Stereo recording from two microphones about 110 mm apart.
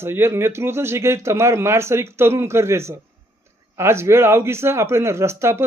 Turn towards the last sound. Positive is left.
turn(degrees=-25)  # may be behind; listen again after turning